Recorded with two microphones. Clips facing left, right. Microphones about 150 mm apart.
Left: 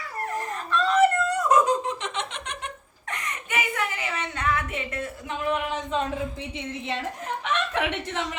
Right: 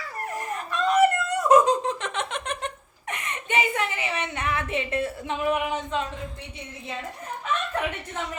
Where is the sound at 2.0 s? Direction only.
50° right (ahead or behind).